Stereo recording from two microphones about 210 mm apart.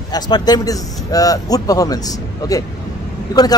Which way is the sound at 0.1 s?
20° left (ahead or behind).